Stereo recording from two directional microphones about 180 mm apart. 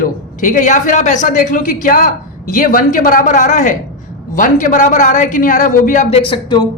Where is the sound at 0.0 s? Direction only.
45° left (ahead or behind).